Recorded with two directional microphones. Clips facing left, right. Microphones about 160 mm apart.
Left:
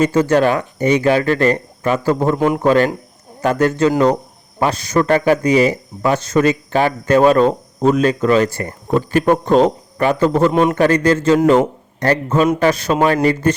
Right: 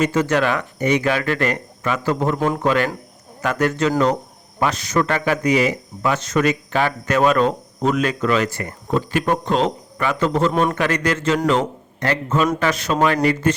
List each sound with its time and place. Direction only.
0.0 s speech: 30° left (ahead or behind)
8.9 s a man's voice: 45° left (ahead or behind)
10.5 s a man's voice: 20° left (ahead or behind)
10.8 s speech: 30° left (ahead or behind)
11.4 s speech: 40° left (ahead or behind)